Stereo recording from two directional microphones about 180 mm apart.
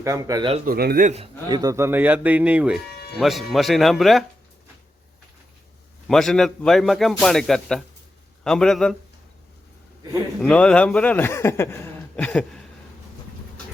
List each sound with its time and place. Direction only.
0.0 s speech: 20° right (ahead or behind)
0.6 s speech: 55° right (ahead or behind)
1.1 s a man's voice: 25° right (ahead or behind); by 4.3 s centre (ahead or behind)
6.1 s a man's voice: centre (ahead or behind)
10.4 s a man's voice: 5° left (ahead or behind)